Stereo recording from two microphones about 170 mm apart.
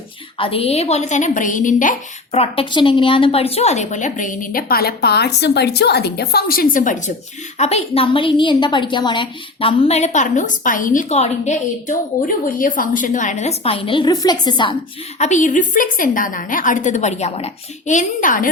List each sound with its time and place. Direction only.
0.3 s a woman's voice: 30° left (ahead or behind); by 2.4 s 50° left (ahead or behind)
2.4 s a woman's voice: 30° left (ahead or behind); by 7.1 s 50° left (ahead or behind)
7.6 s a woman's voice: 40° left (ahead or behind)
12.5 s a woman's voice: 55° left (ahead or behind); by 14.8 s 25° left (ahead or behind)
15.2 s a woman's voice: 45° left (ahead or behind)